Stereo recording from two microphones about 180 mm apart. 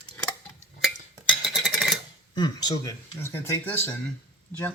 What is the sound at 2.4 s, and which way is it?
Speech, 20° left (ahead or behind).